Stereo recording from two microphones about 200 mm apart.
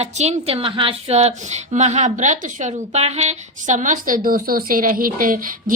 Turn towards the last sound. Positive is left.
turn(degrees=-45)  # may be behind; listen again after turning